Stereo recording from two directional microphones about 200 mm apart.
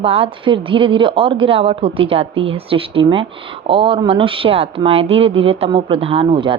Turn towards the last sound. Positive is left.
turn(degrees=-25)  # may be behind; listen again after turning